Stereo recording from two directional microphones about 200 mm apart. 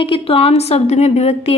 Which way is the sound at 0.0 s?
30° left (ahead or behind).